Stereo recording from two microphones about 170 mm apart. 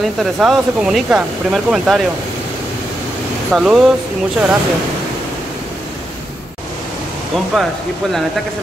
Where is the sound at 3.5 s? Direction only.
5° right (ahead or behind).